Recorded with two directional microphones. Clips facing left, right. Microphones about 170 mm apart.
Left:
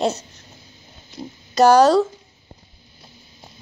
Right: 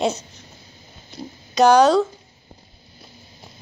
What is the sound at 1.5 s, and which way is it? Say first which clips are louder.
Speech: left 1 dB; 5° left (ahead or behind).